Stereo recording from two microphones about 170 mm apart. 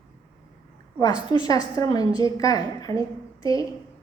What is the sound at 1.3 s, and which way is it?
A woman's voice, 20° left (ahead or behind).